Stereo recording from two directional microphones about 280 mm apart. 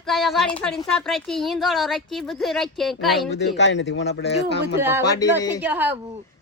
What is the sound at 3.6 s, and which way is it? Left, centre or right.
Speech, left.